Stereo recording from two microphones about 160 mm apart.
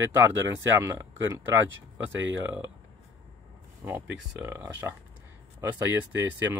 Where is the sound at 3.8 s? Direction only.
15° right (ahead or behind).